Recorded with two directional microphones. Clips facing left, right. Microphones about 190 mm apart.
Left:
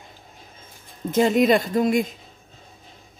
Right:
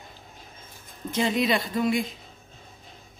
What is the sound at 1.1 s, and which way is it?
Speech, 45° left (ahead or behind).